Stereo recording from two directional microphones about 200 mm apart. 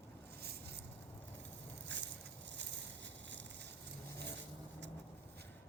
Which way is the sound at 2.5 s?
60° right (ahead or behind).